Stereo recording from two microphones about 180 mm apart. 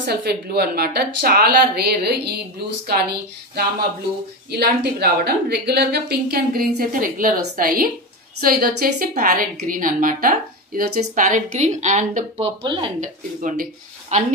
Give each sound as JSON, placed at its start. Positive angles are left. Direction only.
{"t": 0.1, "sound": "a woman's voice", "side_deg": -65}
{"t": 12.6, "sound": "speech", "side_deg": -25}
{"t": 13.0, "sound": "a woman's voice", "side_deg": -50}